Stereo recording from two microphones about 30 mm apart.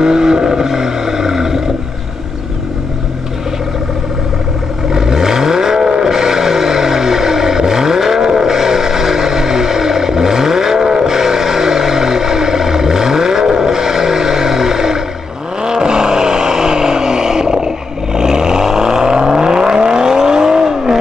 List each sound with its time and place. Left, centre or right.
0.0 s vehicle: right
4.9 s vehicle: centre